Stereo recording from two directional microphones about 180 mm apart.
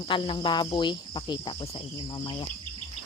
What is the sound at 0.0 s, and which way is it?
Cricket, 30° left (ahead or behind).